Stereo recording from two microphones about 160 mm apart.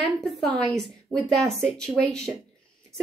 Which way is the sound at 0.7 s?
5° left (ahead or behind).